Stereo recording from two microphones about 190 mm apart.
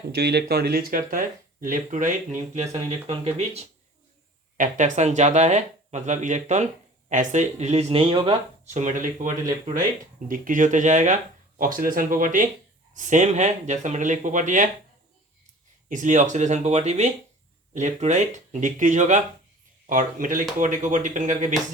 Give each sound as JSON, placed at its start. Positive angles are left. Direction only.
{"t": 0.2, "sound": "speech", "side_deg": -60}
{"t": 2.7, "sound": "speech", "side_deg": -30}
{"t": 15.9, "sound": "speech", "side_deg": -40}